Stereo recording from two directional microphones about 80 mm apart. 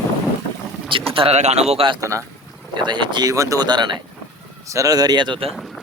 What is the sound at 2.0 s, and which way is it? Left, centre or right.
Speech, right.